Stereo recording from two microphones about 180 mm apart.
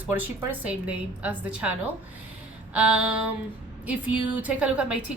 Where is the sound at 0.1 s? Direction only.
10° right (ahead or behind).